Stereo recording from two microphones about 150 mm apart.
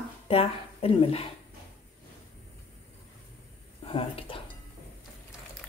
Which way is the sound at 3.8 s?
40° left (ahead or behind).